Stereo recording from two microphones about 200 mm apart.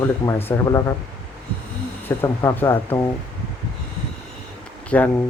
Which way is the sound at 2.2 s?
10° left (ahead or behind).